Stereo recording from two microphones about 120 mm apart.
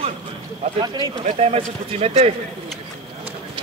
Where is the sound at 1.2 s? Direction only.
60° right (ahead or behind).